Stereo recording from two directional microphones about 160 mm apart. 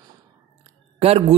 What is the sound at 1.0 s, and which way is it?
Speech, 40° right (ahead or behind).